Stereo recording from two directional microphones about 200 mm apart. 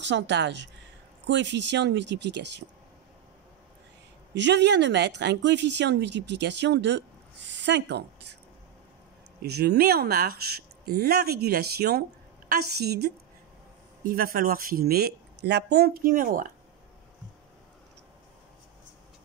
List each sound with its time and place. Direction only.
0.0 s speech: 60° right (ahead or behind)
4.3 s speech: 60° right (ahead or behind)
9.4 s speech: 55° right (ahead or behind)